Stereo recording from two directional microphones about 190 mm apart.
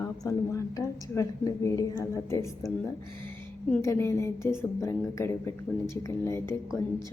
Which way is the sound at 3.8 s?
15° left (ahead or behind).